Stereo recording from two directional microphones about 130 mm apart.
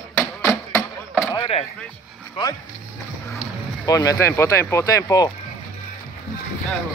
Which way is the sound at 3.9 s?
30° left (ahead or behind).